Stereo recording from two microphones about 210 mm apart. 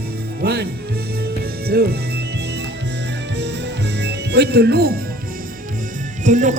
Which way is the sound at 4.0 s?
50° right (ahead or behind).